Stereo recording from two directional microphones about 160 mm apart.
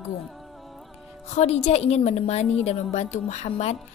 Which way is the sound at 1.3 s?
40° left (ahead or behind).